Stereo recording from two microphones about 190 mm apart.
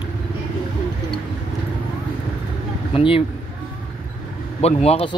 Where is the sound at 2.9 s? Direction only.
30° left (ahead or behind).